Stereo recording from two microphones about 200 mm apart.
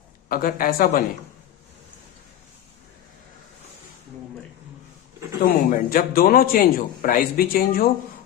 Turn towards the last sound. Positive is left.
turn(degrees=45)  # may be behind; listen again after turning